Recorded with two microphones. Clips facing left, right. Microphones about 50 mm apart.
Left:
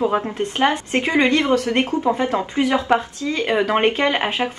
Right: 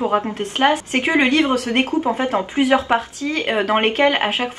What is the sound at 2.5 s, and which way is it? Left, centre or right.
A woman's voice, right.